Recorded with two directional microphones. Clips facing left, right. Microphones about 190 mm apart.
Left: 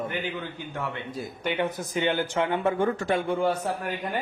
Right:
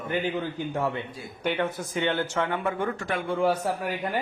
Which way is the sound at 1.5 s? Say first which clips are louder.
Left 1 dB; 15° left (ahead or behind).